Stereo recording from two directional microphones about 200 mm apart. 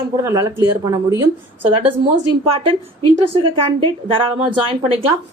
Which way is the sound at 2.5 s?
30° right (ahead or behind).